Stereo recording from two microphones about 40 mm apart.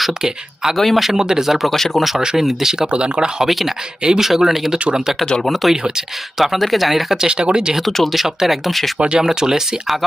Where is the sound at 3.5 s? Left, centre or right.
Centre.